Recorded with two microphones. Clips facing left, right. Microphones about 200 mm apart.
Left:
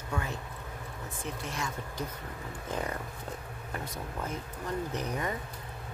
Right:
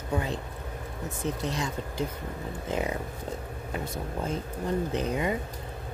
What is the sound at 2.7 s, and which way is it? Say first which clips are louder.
Speech: right 5 dB; 15° right (ahead or behind).